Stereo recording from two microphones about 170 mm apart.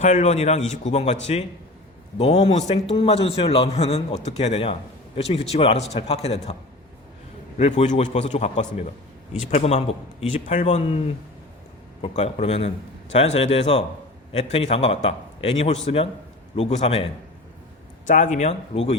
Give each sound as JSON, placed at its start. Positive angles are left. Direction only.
{"t": 0.0, "sound": "a man's voice", "side_deg": 40}
{"t": 7.6, "sound": "a man's voice", "side_deg": 40}
{"t": 12.0, "sound": "a man's voice", "side_deg": 35}
{"t": 18.0, "sound": "a man's voice", "side_deg": 50}